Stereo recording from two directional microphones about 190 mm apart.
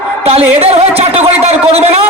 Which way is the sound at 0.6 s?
30° right (ahead or behind).